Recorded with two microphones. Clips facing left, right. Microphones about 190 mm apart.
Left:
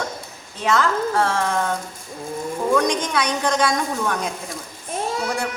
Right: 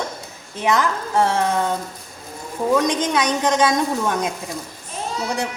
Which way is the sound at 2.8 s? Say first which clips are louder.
Right 2 dB; 20° right (ahead or behind).